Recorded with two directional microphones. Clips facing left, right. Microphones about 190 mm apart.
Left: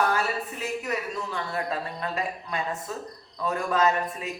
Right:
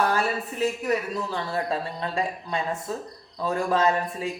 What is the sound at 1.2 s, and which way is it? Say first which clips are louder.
Speech: right 3 dB; 30° right (ahead or behind).